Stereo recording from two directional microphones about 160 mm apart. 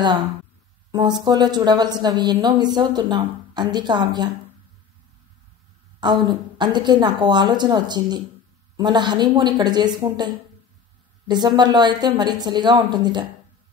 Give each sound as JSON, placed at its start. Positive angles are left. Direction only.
{"t": 0.9, "sound": "a woman's voice", "side_deg": -25}
{"t": 5.9, "sound": "a woman's voice", "side_deg": -30}